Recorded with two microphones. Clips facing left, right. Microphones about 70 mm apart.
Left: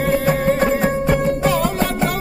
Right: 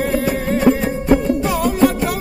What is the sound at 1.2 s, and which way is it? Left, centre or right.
Music, left.